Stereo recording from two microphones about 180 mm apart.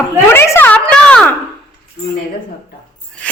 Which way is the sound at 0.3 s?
15° left (ahead or behind).